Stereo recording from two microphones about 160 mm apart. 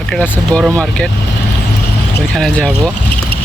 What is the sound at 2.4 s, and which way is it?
Speech, 5° left (ahead or behind).